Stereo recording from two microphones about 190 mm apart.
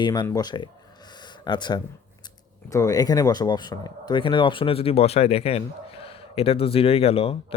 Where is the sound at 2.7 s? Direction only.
15° left (ahead or behind).